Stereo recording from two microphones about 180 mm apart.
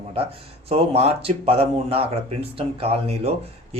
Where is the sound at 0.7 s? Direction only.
35° right (ahead or behind).